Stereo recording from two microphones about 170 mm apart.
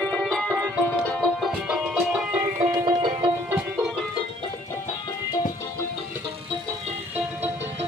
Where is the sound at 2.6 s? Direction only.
45° right (ahead or behind).